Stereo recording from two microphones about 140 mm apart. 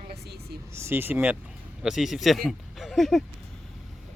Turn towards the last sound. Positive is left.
turn(degrees=0)  # may be behind; listen again after turning